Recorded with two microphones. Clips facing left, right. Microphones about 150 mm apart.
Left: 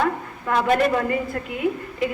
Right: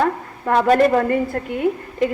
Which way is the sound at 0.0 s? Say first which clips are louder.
Right 3 dB; 40° right (ahead or behind).